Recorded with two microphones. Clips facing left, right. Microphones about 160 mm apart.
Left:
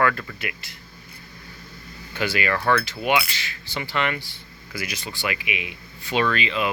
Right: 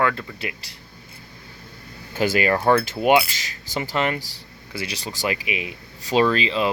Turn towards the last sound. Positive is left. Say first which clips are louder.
# right 4 dB
turn(degrees=-30)  # may be behind; listen again after turning